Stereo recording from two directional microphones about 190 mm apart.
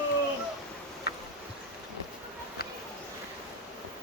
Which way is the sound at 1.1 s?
60° left (ahead or behind).